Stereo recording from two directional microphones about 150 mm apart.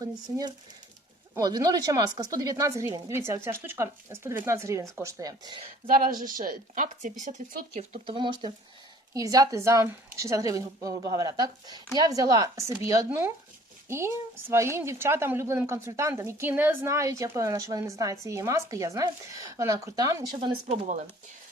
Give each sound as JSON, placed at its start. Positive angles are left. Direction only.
{"t": 0.0, "sound": "speech", "side_deg": -25}
{"t": 5.9, "sound": "a woman's voice", "side_deg": -75}
{"t": 7.7, "sound": "a woman's voice", "side_deg": -40}